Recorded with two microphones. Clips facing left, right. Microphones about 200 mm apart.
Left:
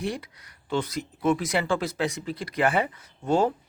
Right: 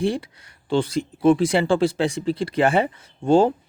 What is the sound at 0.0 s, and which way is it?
A man's voice, 30° right (ahead or behind).